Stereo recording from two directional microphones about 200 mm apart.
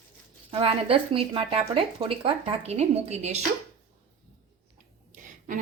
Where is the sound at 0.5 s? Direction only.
30° right (ahead or behind).